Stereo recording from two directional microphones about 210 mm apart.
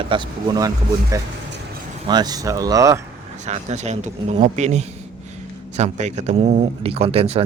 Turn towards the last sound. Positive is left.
turn(degrees=-30)  # may be behind; listen again after turning